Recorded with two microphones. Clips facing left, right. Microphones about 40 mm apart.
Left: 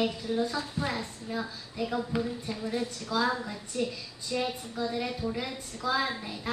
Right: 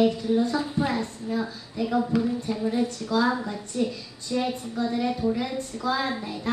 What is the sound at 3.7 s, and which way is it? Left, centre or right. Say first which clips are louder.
A woman's voice: right 4 dB; centre.